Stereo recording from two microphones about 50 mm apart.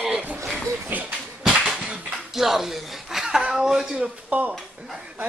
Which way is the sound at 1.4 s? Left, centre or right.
Centre.